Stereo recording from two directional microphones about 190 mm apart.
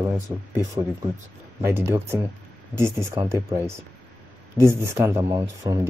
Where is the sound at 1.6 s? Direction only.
15° right (ahead or behind).